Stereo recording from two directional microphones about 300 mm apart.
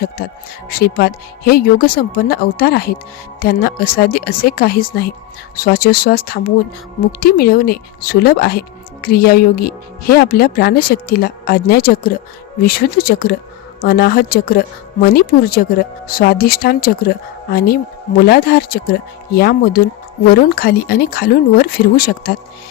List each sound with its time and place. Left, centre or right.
0.2 s speech: left